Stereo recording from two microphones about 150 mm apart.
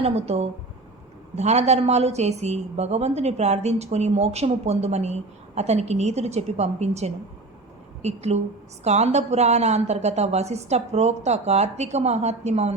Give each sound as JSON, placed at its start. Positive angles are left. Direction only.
{"t": 0.0, "sound": "a woman's voice", "side_deg": -45}